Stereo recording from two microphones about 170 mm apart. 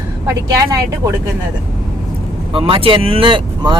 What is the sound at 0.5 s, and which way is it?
Speech, 20° right (ahead or behind).